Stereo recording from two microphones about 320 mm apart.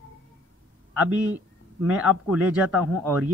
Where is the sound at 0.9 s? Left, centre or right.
Centre.